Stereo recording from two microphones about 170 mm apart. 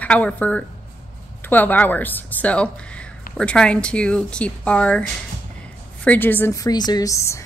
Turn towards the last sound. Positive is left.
turn(degrees=15)  # may be behind; listen again after turning